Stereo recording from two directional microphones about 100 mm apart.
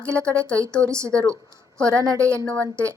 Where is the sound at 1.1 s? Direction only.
10° left (ahead or behind).